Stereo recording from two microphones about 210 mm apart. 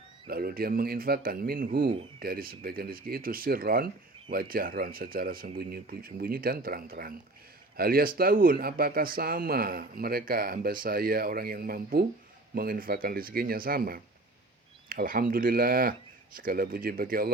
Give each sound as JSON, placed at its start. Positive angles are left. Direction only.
{"t": 0.3, "sound": "speech", "side_deg": -45}